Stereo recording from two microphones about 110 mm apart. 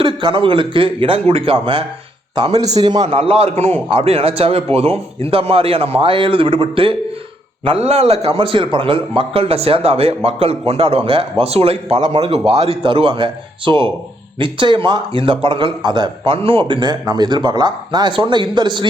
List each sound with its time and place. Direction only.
0.0 s a man's voice: 45° right (ahead or behind)
2.6 s a man's voice: 35° right (ahead or behind)
3.1 s speech: 60° right (ahead or behind)
11.9 s a man's voice: 45° right (ahead or behind)
12.3 s a man's voice: 65° right (ahead or behind); by 18.9 s 45° right (ahead or behind)